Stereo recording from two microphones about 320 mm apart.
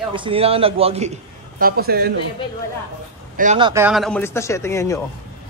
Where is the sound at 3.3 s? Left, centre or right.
Centre.